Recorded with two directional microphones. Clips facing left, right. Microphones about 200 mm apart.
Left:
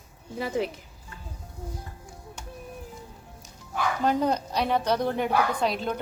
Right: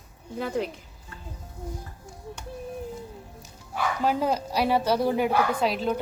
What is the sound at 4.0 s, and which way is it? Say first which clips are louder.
Speech: left 1 dB; 5° right (ahead or behind).